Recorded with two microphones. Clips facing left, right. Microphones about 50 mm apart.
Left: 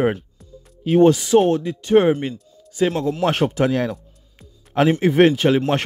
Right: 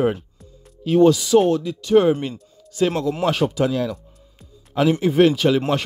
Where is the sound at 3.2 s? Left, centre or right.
Left.